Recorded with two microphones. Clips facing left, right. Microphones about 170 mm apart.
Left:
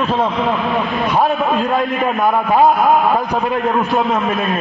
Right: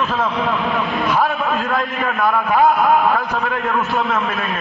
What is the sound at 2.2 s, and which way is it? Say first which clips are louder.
A man's voice: left 2 dB; 25° left (ahead or behind).